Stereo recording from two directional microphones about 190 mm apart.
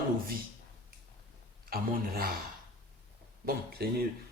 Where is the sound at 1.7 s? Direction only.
50° right (ahead or behind).